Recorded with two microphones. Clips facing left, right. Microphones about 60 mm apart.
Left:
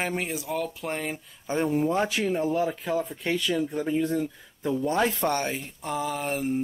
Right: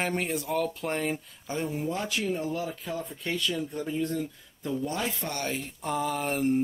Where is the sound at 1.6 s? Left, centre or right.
Left.